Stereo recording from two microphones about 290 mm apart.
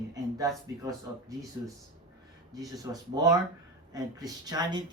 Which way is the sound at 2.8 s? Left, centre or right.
Centre.